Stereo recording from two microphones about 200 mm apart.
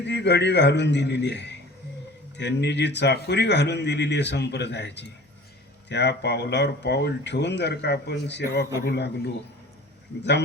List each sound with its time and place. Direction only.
0.0 s speech: 60° left (ahead or behind)